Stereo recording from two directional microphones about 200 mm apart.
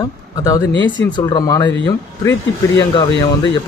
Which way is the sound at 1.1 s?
20° left (ahead or behind).